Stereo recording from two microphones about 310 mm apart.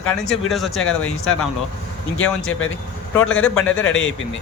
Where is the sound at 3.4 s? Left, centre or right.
Centre.